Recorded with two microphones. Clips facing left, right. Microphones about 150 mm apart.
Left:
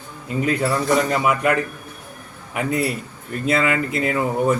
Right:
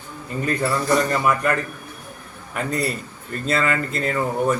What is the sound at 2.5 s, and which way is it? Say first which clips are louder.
Speech: left 2 dB; 10° left (ahead or behind).